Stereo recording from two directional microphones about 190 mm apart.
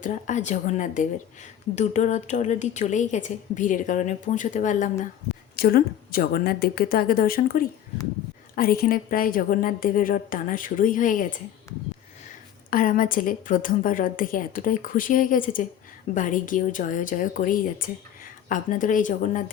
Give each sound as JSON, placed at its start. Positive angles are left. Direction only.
{"t": 0.0, "sound": "a woman's voice", "side_deg": 40}
{"t": 5.5, "sound": "a woman's voice", "side_deg": 50}
{"t": 12.7, "sound": "a woman's voice", "side_deg": 45}